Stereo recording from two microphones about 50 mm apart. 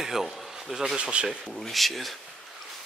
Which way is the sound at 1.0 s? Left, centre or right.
Right.